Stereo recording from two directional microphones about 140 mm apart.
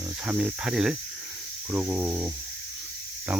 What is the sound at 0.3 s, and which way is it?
Speech, 10° right (ahead or behind).